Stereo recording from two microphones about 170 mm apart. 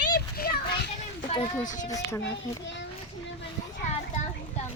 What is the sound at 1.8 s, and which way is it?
Speech, 20° left (ahead or behind).